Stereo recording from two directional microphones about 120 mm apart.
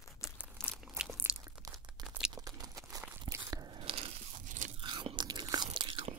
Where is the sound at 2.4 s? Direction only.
30° right (ahead or behind).